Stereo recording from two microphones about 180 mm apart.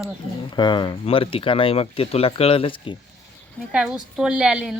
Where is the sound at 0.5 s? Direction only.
25° left (ahead or behind).